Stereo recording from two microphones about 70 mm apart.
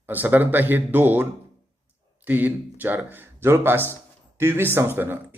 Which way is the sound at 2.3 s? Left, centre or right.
Right.